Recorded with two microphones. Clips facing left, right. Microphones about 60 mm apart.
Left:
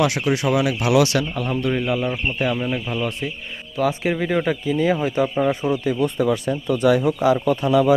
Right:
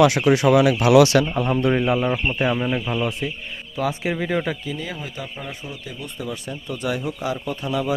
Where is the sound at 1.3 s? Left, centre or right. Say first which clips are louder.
Right 3 dB; right.